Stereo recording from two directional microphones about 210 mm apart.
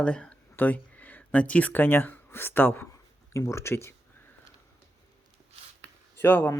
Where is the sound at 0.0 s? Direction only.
5° left (ahead or behind).